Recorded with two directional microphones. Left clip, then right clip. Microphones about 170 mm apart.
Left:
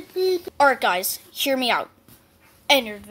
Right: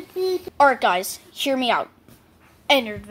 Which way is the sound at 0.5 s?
Centre (ahead or behind).